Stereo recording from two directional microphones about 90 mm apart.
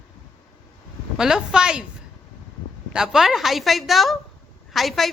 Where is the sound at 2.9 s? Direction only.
5° right (ahead or behind).